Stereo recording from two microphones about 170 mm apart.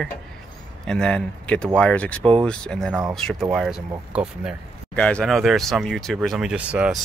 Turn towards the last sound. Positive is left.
turn(degrees=-5)  # may be behind; listen again after turning